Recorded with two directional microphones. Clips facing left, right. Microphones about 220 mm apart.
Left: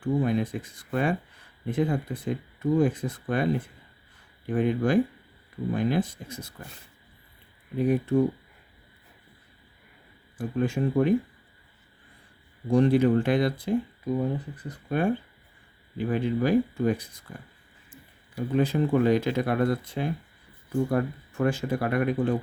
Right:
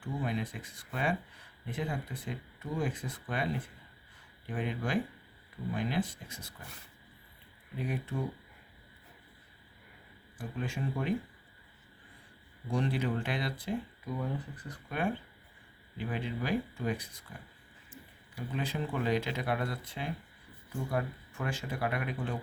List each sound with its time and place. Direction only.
0.0 s speech: 45° left (ahead or behind)
7.8 s speech: 45° left (ahead or behind)
10.3 s speech: 45° left (ahead or behind)
12.7 s speech: 45° left (ahead or behind)
14.8 s speech: 40° left (ahead or behind)
18.3 s speech: 45° left (ahead or behind)